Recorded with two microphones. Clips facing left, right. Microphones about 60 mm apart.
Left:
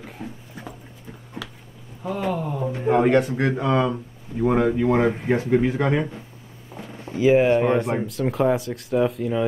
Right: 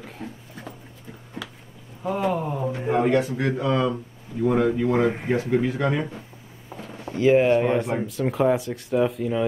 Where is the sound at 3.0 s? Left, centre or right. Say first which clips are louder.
Left 2 dB; left.